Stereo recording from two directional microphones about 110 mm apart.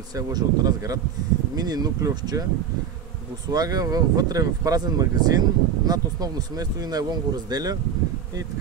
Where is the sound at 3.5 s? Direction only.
35° right (ahead or behind).